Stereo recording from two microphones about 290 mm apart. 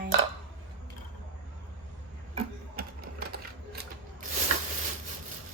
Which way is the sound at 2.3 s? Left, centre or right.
Right.